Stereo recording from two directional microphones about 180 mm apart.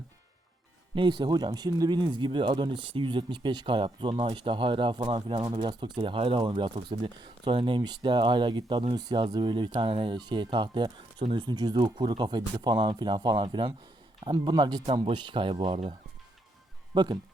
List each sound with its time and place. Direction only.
0.9 s speech: 25° right (ahead or behind)